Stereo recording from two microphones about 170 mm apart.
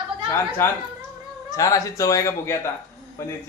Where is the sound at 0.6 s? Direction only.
15° left (ahead or behind).